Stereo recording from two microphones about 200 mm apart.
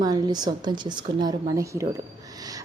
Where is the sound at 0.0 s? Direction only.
20° right (ahead or behind).